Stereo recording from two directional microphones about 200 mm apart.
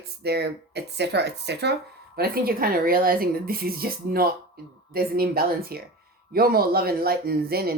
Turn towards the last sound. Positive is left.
turn(degrees=-50)  # may be behind; listen again after turning